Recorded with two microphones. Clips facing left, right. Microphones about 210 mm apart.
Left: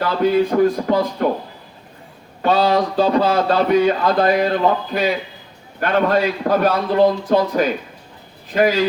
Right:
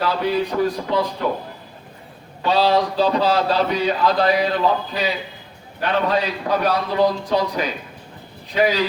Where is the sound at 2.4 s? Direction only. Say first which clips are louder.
Left 2 dB; 50° left (ahead or behind).